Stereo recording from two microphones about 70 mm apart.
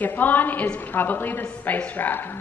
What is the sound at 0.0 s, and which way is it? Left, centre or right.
A woman's voice, left.